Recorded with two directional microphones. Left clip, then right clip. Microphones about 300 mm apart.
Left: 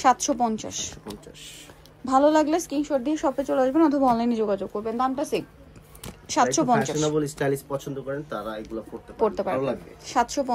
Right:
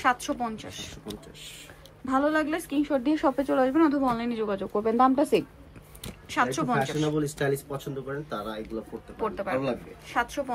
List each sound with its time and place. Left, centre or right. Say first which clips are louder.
0.0 s a woman's voice: left 5 dB; left
2.0 s a woman's voice: left 6 dB; centre
6.2 s a woman's voice: left 5 dB; left
7.7 s speech: left 4 dB; centre
9.2 s a woman's voice: left 5 dB; left